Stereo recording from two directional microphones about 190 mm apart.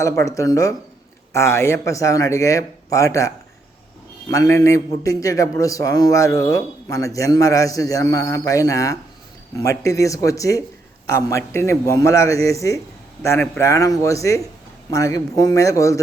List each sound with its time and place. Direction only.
0.0 s a man's voice: 15° left (ahead or behind)